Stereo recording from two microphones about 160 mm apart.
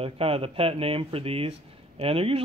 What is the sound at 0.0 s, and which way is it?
Speech, 35° right (ahead or behind).